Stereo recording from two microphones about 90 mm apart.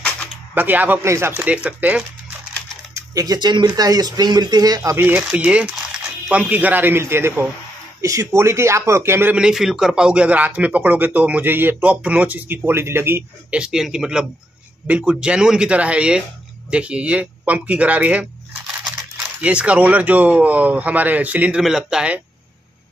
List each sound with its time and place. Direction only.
0.6 s a man's voice: 20° right (ahead or behind)
1.4 s speech: 15° right (ahead or behind)
2.9 s speech: 45° right (ahead or behind)
4.9 s a man's voice: 20° right (ahead or behind)
9.3 s speech: 10° right (ahead or behind); by 13.2 s 25° right (ahead or behind)
13.5 s speech: 10° right (ahead or behind)